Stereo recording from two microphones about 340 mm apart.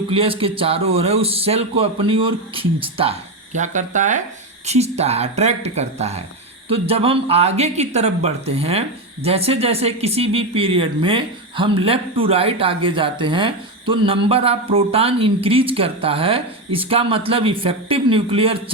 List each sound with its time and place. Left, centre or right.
0.1 s speech: centre